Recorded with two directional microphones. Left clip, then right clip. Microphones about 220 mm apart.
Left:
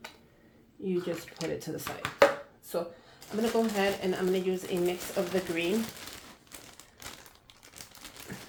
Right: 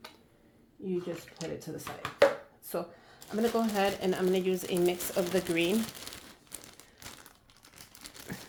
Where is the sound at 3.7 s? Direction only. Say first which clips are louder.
Even; 45° right (ahead or behind).